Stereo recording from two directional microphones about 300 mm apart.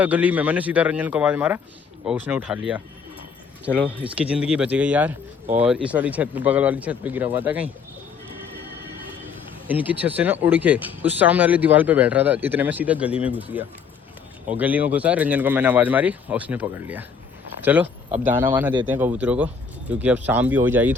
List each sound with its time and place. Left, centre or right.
0.0 s speech: centre
3.8 s speech: centre
9.2 s speech: centre